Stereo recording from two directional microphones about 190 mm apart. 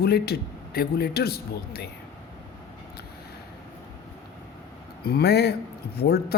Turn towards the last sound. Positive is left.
turn(degrees=55)  # may be behind; listen again after turning